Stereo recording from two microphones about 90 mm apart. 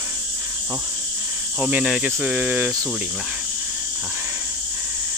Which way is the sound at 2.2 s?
15° right (ahead or behind).